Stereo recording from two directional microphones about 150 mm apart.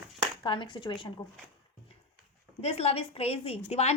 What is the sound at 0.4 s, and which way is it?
Speech, 30° left (ahead or behind).